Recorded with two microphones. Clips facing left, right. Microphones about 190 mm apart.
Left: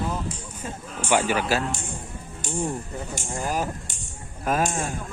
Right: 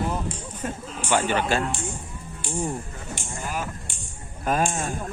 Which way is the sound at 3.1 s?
40° left (ahead or behind).